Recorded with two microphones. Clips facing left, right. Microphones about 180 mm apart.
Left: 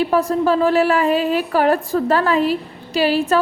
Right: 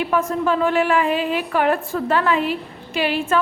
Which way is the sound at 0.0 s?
35° left (ahead or behind).